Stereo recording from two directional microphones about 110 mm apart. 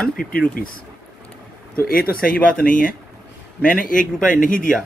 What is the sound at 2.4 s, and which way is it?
Speech, 10° left (ahead or behind).